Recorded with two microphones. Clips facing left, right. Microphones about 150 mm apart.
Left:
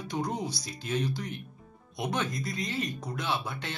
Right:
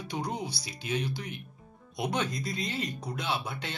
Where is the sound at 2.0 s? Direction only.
15° right (ahead or behind).